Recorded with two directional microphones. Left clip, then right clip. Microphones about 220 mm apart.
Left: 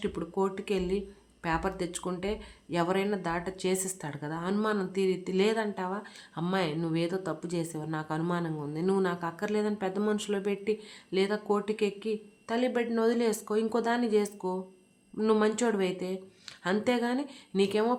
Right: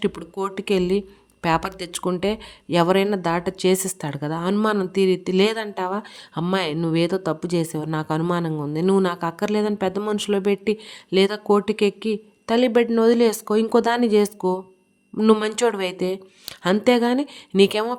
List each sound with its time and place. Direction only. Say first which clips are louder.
0.0 s speech: right 5 dB; 40° right (ahead or behind)